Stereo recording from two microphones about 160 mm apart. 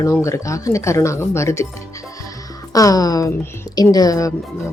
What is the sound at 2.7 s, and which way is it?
Speech, 20° left (ahead or behind).